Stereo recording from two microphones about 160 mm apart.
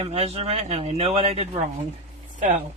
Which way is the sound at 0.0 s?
40° right (ahead or behind).